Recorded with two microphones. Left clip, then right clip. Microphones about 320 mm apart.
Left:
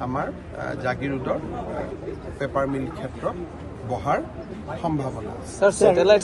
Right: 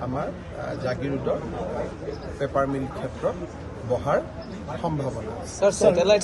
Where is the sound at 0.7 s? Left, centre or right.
Centre.